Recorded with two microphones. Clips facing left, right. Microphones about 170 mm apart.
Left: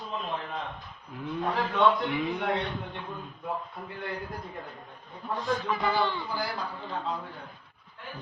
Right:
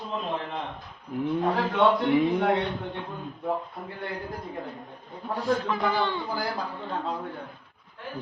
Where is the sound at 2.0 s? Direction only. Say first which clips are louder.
Right 7 dB; 40° right (ahead or behind).